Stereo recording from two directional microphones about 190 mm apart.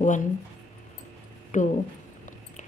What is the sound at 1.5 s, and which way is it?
Speech, 40° left (ahead or behind).